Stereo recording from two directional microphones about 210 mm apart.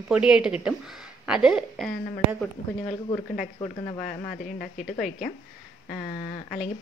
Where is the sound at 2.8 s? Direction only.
30° left (ahead or behind).